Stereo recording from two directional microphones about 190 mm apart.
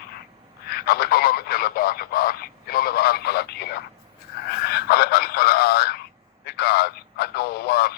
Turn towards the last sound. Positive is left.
turn(degrees=55)  # may be behind; listen again after turning